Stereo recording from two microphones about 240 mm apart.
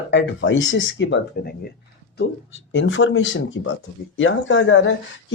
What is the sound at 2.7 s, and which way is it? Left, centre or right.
Speech, left.